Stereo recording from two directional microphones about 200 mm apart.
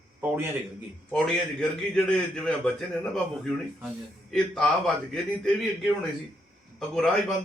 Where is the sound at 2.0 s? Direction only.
5° left (ahead or behind).